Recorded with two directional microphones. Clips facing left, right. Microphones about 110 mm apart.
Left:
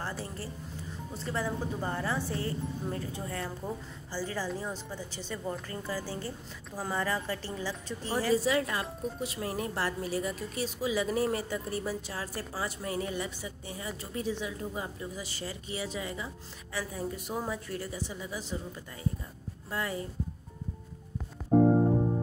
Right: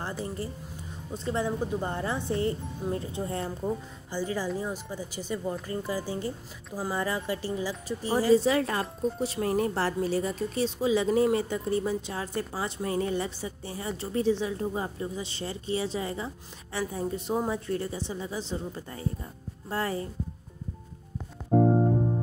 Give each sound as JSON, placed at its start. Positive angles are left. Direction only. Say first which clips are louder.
{"t": 0.0, "sound": "a woman's voice", "louder": "right 4 dB", "side_deg": -20}